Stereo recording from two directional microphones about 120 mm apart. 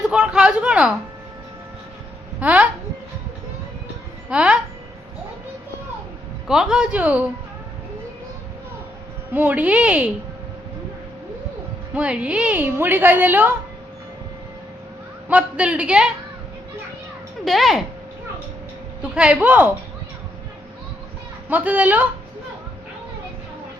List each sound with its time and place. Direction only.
0.1 s a woman's voice: 10° right (ahead or behind)
2.4 s a woman's voice: 10° right (ahead or behind)
4.3 s a woman's voice: 10° right (ahead or behind)
6.5 s a woman's voice: 5° right (ahead or behind)
9.3 s a woman's voice: 15° right (ahead or behind)
11.9 s a woman's voice: 10° right (ahead or behind)
15.3 s a woman's voice: 10° right (ahead or behind)
17.4 s speech: centre (ahead or behind)
19.1 s a woman's voice: 10° right (ahead or behind)
21.5 s a woman's voice: 10° right (ahead or behind)